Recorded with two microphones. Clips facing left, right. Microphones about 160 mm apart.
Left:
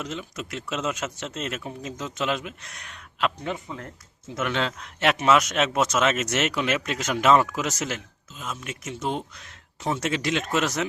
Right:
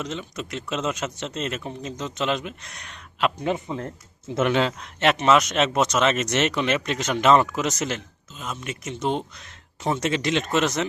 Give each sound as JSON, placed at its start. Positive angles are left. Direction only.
{"t": 0.0, "sound": "speech", "side_deg": 5}
{"t": 3.4, "sound": "speech", "side_deg": -25}
{"t": 4.5, "sound": "speech", "side_deg": -5}